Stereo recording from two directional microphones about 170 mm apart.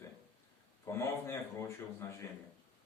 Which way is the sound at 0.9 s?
15° left (ahead or behind).